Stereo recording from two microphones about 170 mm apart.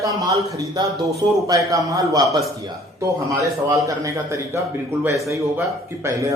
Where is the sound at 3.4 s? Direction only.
20° right (ahead or behind).